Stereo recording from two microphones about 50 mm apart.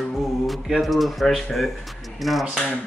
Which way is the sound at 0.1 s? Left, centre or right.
Centre.